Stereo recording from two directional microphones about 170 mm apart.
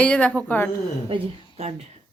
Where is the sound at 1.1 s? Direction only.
40° right (ahead or behind).